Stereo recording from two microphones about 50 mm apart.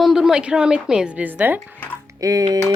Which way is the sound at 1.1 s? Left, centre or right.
Right.